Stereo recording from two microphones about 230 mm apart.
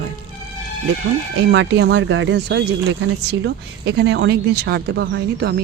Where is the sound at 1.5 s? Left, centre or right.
Right.